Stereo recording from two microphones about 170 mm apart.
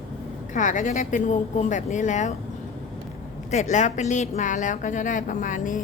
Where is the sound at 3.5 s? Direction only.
45° left (ahead or behind).